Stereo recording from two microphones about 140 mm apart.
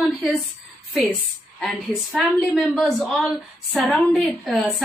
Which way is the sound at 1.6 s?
Centre (ahead or behind).